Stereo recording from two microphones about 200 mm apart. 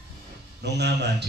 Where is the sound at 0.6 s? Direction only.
55° right (ahead or behind).